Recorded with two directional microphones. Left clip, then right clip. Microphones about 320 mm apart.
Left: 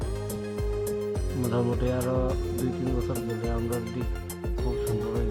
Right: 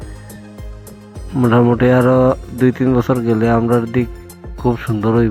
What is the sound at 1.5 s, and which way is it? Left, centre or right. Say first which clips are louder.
Speech: right 16 dB; centre.